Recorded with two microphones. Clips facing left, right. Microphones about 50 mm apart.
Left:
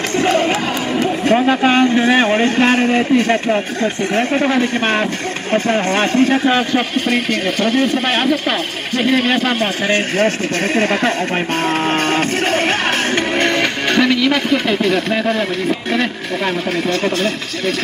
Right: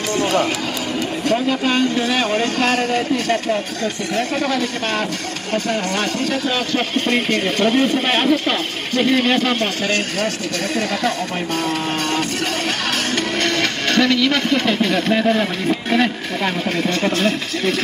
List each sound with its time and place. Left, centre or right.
0.2 s a sound: left
0.9 s speech: left
7.1 s speech: centre
9.8 s speech: left
11.6 s music: left
13.4 s a sound: centre
15.9 s speech: centre